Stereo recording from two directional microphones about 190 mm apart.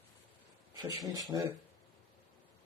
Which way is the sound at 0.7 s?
20° right (ahead or behind).